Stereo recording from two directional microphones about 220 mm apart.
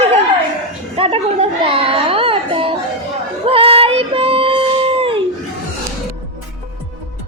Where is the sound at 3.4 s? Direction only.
25° right (ahead or behind).